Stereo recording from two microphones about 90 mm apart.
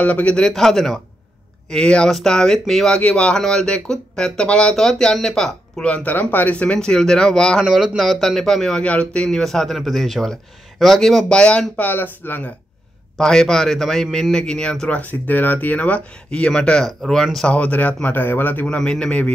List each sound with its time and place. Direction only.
0.0 s speech: 15° left (ahead or behind)
7.6 s speech: 5° right (ahead or behind); by 12.5 s 20° left (ahead or behind)
13.2 s speech: 5° left (ahead or behind)
17.6 s speech: 15° left (ahead or behind)
18.8 s speech: 10° left (ahead or behind)